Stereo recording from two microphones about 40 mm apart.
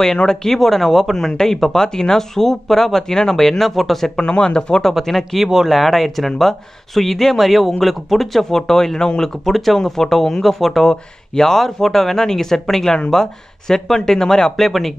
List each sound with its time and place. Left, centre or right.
0.2 s speech: centre
4.2 s speech: left
5.0 s speech: centre
5.4 s speech: centre
5.7 s speech: centre
8.5 s speech: centre
9.4 s speech: centre